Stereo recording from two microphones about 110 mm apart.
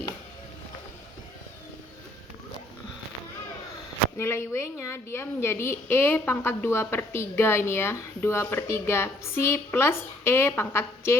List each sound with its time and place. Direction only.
4.2 s a woman's voice: 25° left (ahead or behind)